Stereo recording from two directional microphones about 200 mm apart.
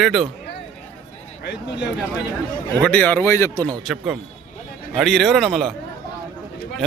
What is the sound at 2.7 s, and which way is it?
Speech, 10° left (ahead or behind).